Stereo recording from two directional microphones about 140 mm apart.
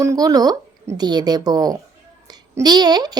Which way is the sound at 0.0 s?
25° right (ahead or behind).